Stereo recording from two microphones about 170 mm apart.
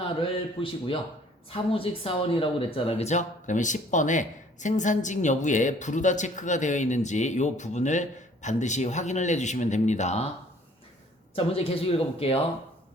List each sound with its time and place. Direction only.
0.2 s a man's voice: 30° left (ahead or behind)
11.3 s a man's voice: 35° left (ahead or behind)